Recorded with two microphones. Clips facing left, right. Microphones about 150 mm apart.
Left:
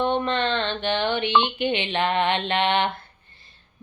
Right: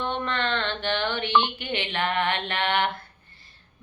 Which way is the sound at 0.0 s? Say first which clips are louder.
Left 5 dB; 20° left (ahead or behind).